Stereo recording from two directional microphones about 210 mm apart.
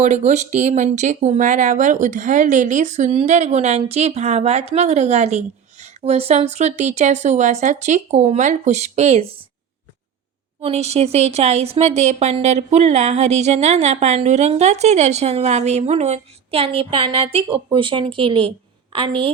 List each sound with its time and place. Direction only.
0.0 s speech: 35° right (ahead or behind)
10.6 s a woman's voice: 30° right (ahead or behind)